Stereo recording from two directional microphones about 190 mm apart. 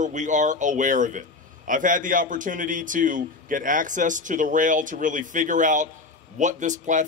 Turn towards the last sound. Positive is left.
turn(degrees=-40)  # may be behind; listen again after turning